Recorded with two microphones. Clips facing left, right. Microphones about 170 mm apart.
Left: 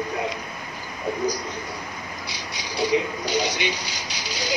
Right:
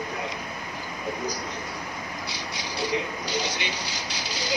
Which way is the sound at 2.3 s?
15° left (ahead or behind).